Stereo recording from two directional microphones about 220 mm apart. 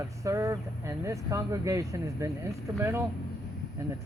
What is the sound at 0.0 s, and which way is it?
Speech, 15° right (ahead or behind).